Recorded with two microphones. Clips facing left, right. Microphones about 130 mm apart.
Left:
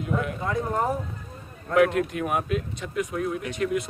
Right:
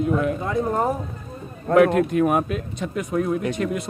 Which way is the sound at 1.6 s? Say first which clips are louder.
Right 5 dB; 40° right (ahead or behind).